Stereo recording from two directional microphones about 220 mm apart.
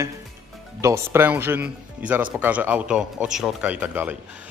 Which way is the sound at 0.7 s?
15° right (ahead or behind).